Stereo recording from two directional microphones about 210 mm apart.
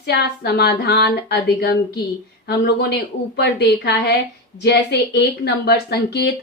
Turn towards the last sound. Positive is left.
turn(degrees=50)  # may be behind; listen again after turning